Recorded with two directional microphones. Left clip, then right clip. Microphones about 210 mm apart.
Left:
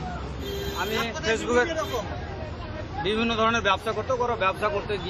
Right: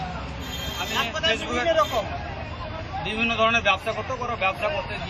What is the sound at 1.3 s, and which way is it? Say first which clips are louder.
Speech: left 3 dB; 15° left (ahead or behind).